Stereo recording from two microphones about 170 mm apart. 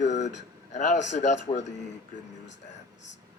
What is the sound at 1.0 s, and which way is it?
Speech, 45° left (ahead or behind).